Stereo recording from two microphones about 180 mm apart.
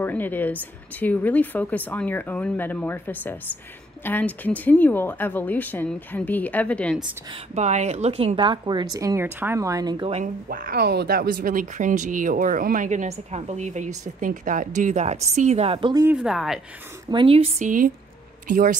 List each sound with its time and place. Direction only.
0.0 s speech: 10° left (ahead or behind)
7.5 s speech: 40° right (ahead or behind); by 10.1 s 20° right (ahead or behind)
10.1 s a woman's voice: 50° right (ahead or behind); by 16.1 s 25° right (ahead or behind)
16.1 s speech: 5° right (ahead or behind)
17.1 s a woman's voice: 30° right (ahead or behind)
17.6 s speech: 50° right (ahead or behind)